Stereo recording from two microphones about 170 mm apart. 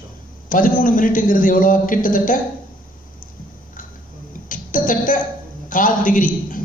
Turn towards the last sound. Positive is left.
turn(degrees=50)  # may be behind; listen again after turning